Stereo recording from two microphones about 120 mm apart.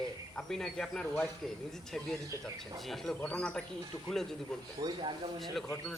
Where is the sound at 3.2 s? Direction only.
10° left (ahead or behind).